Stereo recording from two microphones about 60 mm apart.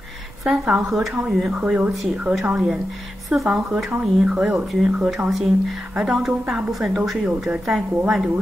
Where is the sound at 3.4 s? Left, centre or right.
Right.